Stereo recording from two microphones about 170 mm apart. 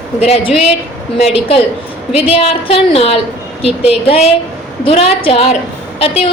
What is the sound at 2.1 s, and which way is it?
A woman's voice, 35° left (ahead or behind).